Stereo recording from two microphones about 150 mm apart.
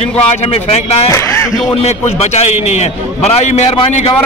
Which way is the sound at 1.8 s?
45° left (ahead or behind).